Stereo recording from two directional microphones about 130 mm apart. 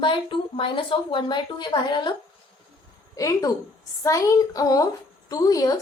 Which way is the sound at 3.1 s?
25° left (ahead or behind).